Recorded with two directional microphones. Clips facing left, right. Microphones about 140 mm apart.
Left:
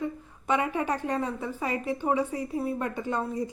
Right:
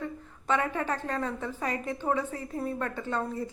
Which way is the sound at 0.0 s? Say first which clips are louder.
Left 4 dB; 15° left (ahead or behind).